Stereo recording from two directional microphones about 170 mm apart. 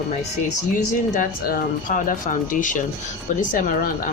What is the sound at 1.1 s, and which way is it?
Speech, 50° left (ahead or behind).